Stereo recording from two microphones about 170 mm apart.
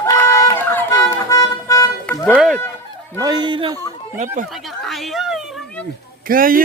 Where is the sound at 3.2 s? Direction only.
25° right (ahead or behind).